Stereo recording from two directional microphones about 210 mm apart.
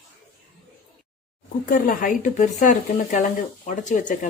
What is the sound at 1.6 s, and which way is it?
Speech, 45° left (ahead or behind).